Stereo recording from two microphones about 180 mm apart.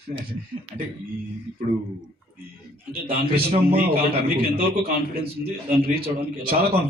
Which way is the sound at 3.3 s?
30° right (ahead or behind).